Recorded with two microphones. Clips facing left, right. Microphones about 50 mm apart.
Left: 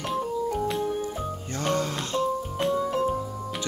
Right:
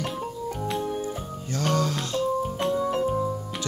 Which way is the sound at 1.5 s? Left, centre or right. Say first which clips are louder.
Right 2 dB; left.